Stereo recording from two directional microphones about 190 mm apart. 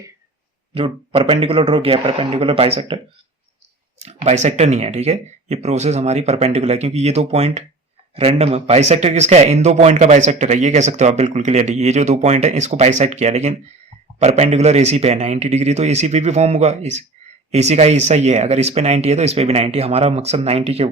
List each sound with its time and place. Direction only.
0.7 s speech: 30° right (ahead or behind)